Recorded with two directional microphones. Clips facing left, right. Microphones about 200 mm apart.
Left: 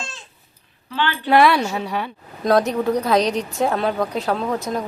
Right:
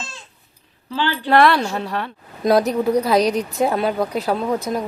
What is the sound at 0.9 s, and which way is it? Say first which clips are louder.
Speech: right 1 dB; 35° right (ahead or behind).